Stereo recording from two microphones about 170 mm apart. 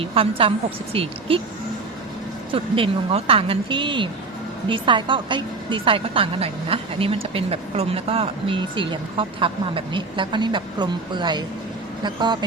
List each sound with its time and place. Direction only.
0.0 s speech: 35° right (ahead or behind)
2.5 s a woman's voice: 30° right (ahead or behind)